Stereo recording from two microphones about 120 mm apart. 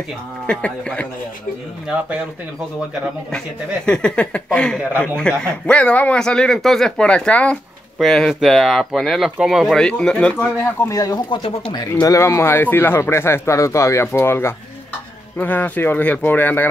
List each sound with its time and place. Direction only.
0.5 s speech: 10° left (ahead or behind)
1.9 s speech: 10° right (ahead or behind)
3.3 s speech: 5° left (ahead or behind)
10.6 s speech: 25° left (ahead or behind)